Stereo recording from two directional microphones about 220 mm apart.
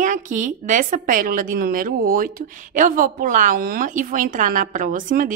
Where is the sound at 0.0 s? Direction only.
35° right (ahead or behind).